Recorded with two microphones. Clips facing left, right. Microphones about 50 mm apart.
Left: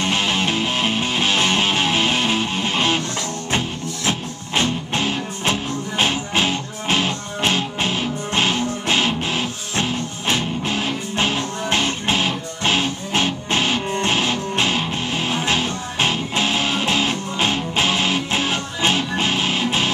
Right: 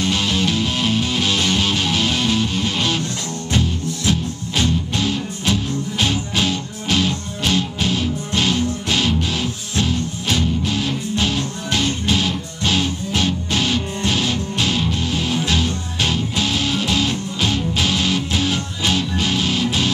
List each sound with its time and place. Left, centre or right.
0.0 s music: left